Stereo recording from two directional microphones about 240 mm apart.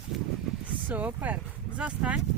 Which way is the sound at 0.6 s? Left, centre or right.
Centre.